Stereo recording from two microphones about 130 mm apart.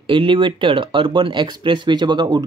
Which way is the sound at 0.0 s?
40° right (ahead or behind).